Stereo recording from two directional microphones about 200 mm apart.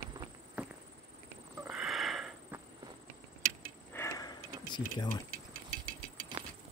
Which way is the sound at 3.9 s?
15° left (ahead or behind).